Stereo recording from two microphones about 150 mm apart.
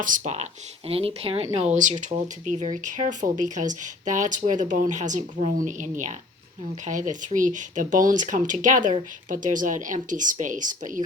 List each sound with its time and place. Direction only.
0.0 s speech: 55° right (ahead or behind)
0.9 s speech: 40° right (ahead or behind); by 11.0 s 60° right (ahead or behind)